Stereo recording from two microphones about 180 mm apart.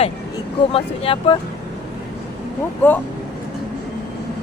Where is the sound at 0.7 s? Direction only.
30° left (ahead or behind).